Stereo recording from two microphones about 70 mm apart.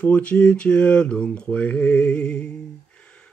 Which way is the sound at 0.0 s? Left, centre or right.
Centre.